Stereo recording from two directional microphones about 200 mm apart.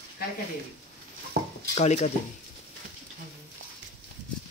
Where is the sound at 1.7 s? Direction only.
35° left (ahead or behind).